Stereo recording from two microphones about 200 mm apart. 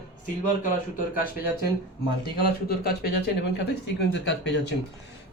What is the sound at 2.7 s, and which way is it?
Speech, 50° left (ahead or behind).